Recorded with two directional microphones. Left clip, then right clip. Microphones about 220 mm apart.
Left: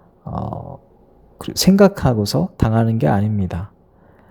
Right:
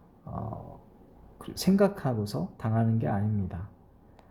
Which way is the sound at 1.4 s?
35° left (ahead or behind).